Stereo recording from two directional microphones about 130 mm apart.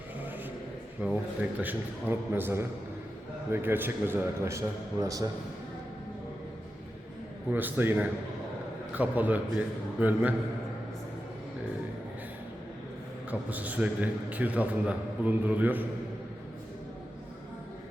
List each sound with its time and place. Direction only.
1.0 s a man's voice: 10° right (ahead or behind); by 5.3 s 25° right (ahead or behind)
7.5 s a man's voice: 15° right (ahead or behind)
13.5 s a man's voice: 10° right (ahead or behind)